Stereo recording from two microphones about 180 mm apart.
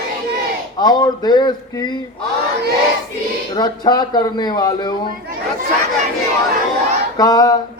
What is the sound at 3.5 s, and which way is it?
Speech, 25° left (ahead or behind).